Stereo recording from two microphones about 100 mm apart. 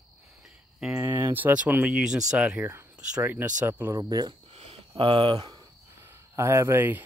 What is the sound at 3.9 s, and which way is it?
Speech, 40° right (ahead or behind).